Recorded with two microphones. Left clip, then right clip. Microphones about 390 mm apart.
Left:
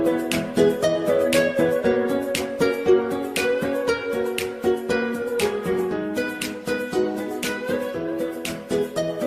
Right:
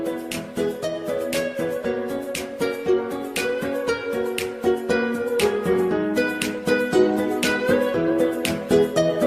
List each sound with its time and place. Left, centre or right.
0.5 s music: left
2.6 s music: left
3.4 s music: centre
4.2 s music: centre; by 6.2 s right
6.7 s music: right